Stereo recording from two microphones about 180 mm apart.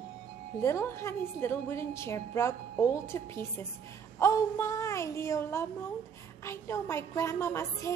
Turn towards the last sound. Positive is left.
turn(degrees=15)  # may be behind; listen again after turning